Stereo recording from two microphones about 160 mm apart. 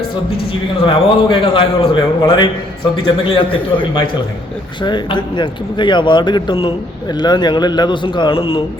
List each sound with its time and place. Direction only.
0.8 s a man's voice: 30° left (ahead or behind)